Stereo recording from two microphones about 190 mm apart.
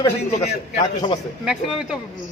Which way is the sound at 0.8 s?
25° left (ahead or behind).